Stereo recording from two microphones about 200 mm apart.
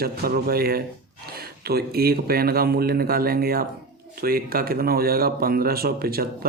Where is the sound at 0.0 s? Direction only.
50° right (ahead or behind).